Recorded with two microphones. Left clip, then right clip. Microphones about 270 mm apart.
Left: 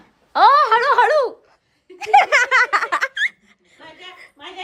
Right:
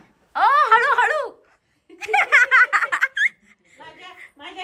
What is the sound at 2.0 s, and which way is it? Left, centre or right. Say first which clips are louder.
Snicker: left 3 dB; centre.